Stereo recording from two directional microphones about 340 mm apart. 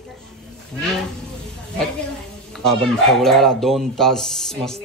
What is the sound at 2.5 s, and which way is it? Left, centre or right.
Speech, centre.